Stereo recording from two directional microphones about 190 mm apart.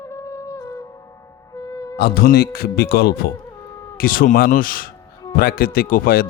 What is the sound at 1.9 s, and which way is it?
A man's voice, 55° left (ahead or behind).